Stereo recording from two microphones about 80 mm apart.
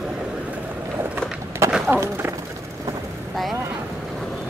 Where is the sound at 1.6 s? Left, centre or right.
Right.